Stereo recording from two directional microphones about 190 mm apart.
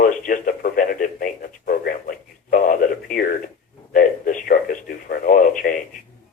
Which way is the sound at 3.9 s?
45° left (ahead or behind).